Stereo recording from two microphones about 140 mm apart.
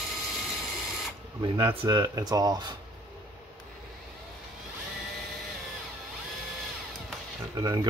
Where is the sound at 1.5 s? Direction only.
35° right (ahead or behind).